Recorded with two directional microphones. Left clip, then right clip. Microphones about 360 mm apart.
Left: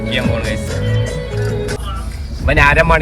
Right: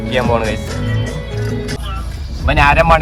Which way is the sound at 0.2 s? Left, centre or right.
Centre.